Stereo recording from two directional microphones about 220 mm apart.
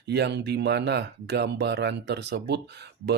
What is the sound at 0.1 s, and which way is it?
Speech, 50° right (ahead or behind).